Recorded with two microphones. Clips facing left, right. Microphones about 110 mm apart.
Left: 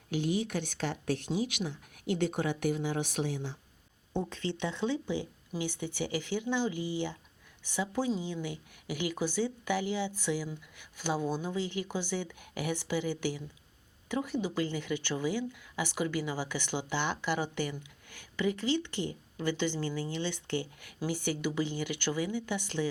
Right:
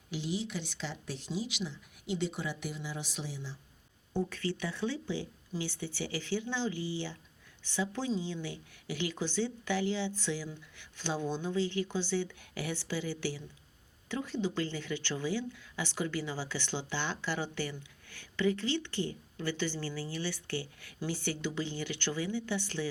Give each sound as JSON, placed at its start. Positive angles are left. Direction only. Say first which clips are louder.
{"t": 0.1, "sound": "speech", "louder": "left 5 dB", "side_deg": 55}
{"t": 4.1, "sound": "speech", "louder": "even", "side_deg": 20}